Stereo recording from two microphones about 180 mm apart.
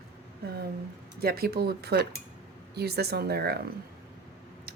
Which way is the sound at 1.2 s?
60° right (ahead or behind).